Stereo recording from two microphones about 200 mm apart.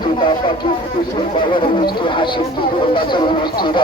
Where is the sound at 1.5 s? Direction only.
25° left (ahead or behind).